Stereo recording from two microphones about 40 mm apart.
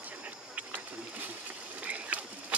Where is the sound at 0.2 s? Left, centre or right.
Right.